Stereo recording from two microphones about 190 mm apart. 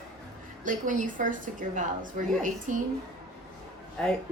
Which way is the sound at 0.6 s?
45° right (ahead or behind).